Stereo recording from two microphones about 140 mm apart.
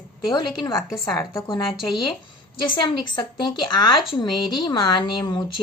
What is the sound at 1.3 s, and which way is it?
Speech, 25° left (ahead or behind).